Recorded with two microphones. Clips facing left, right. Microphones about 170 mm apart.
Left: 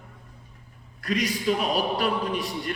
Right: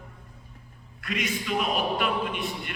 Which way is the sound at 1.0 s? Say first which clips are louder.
Left 6 dB; 35° left (ahead or behind).